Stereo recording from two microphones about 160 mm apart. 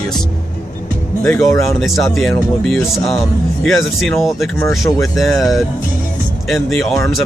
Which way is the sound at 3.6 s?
Centre (ahead or behind).